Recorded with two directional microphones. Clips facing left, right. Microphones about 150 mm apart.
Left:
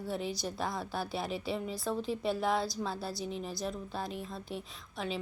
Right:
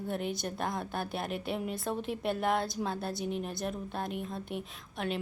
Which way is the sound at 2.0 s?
60° right (ahead or behind).